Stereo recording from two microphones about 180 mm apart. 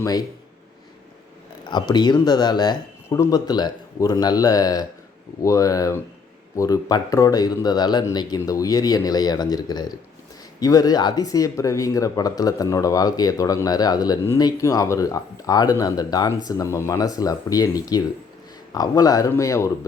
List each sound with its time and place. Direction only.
0.0 s speech: 20° left (ahead or behind)
1.7 s speech: 25° left (ahead or behind)